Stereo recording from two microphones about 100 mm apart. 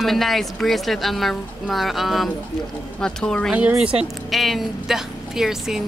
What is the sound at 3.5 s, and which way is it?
Speech, 15° right (ahead or behind).